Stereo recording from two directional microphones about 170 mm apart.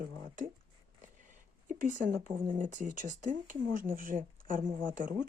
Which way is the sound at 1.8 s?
50° right (ahead or behind).